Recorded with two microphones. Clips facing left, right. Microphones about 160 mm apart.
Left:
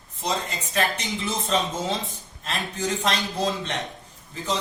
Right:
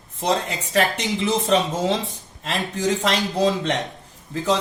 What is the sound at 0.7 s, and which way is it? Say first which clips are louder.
A man's voice: right 5 dB; 75° right (ahead or behind).